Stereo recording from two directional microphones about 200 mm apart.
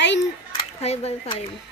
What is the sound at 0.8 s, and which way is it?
Speech, 30° left (ahead or behind).